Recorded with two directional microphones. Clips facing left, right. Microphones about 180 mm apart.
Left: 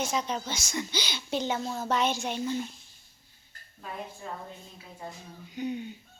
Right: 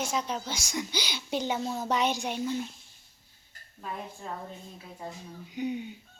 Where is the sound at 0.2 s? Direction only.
10° right (ahead or behind).